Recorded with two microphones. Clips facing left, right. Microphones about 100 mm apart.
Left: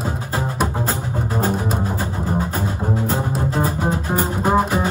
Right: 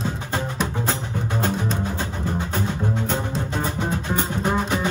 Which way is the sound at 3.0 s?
40° left (ahead or behind).